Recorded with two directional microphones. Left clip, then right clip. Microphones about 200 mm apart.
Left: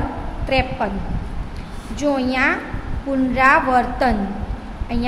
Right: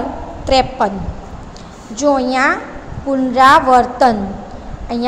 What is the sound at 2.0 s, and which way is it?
A woman's voice, 15° right (ahead or behind).